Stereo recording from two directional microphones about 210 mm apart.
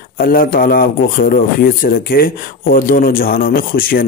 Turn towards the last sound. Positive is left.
turn(degrees=45)  # may be behind; listen again after turning